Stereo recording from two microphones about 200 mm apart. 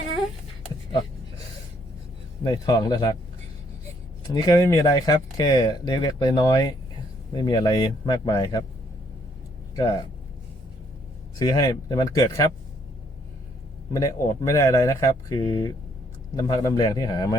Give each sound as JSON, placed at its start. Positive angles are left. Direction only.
{"t": 2.4, "sound": "speech", "side_deg": 20}
{"t": 4.4, "sound": "speech", "side_deg": 15}
{"t": 11.3, "sound": "speech", "side_deg": 20}
{"t": 13.9, "sound": "speech", "side_deg": 15}